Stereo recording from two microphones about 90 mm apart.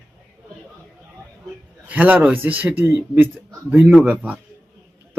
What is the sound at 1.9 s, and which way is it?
A man's voice, 15° right (ahead or behind).